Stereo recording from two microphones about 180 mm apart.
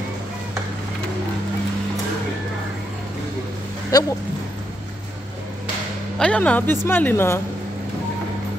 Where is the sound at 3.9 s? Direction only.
20° left (ahead or behind).